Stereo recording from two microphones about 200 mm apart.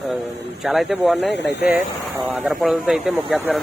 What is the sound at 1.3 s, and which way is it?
Speech, 60° left (ahead or behind).